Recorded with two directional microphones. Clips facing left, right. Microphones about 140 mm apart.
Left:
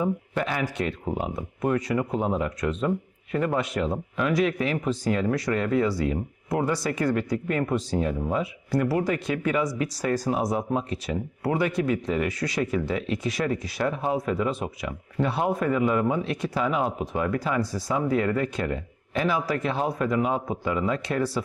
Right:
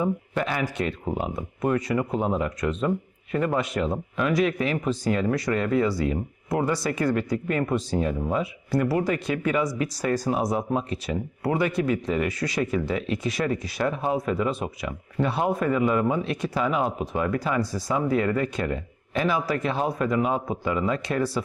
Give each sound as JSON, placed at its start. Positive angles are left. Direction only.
{"t": 0.0, "sound": "speech", "side_deg": -20}
{"t": 1.0, "sound": "speech", "side_deg": -30}